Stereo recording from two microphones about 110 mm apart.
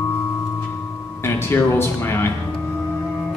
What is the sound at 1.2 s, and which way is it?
Speech, 20° left (ahead or behind).